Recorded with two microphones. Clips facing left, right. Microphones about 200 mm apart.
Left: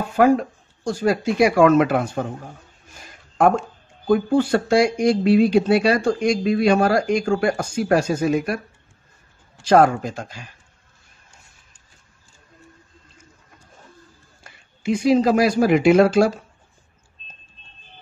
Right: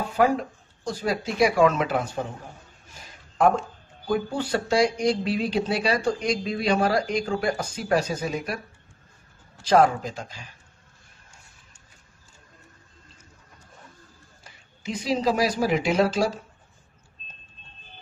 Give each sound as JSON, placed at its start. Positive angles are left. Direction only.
{"t": 0.8, "sound": "speech", "side_deg": 50}
{"t": 3.3, "sound": "speech", "side_deg": 50}
{"t": 9.7, "sound": "speech", "side_deg": 55}
{"t": 14.4, "sound": "speech", "side_deg": 55}